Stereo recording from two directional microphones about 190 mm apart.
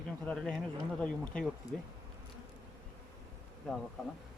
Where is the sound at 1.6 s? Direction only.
20° left (ahead or behind).